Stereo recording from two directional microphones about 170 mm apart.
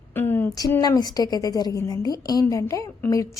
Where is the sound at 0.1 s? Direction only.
10° left (ahead or behind).